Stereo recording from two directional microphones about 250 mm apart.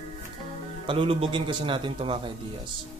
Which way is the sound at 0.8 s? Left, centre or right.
Right.